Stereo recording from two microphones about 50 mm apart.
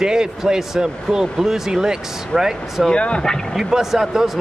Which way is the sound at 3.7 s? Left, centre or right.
Centre.